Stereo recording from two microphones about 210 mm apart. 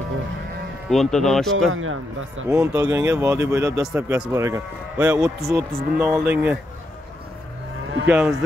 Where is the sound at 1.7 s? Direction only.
70° right (ahead or behind).